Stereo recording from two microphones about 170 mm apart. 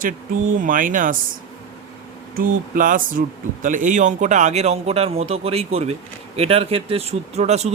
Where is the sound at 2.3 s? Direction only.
55° right (ahead or behind).